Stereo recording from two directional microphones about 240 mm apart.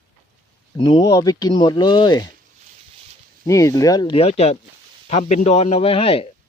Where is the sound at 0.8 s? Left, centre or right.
Centre.